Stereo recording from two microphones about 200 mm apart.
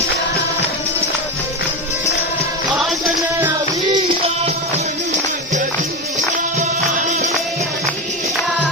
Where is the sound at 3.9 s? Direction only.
25° right (ahead or behind).